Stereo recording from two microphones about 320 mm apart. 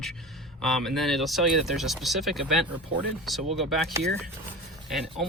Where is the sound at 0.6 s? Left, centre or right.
Centre.